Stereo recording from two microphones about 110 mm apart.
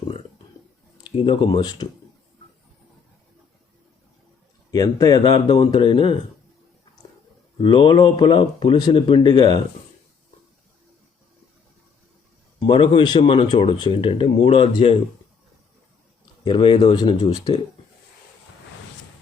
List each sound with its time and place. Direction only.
1.0 s speech: 45° left (ahead or behind)
4.7 s speech: 35° left (ahead or behind)
7.6 s speech: 45° left (ahead or behind)
12.5 s speech: 50° left (ahead or behind)
14.4 s speech: 60° left (ahead or behind)
14.7 s speech: 45° left (ahead or behind)
16.4 s speech: 50° left (ahead or behind)